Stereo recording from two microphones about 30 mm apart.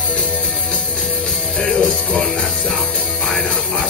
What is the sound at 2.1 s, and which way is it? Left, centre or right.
Music, centre.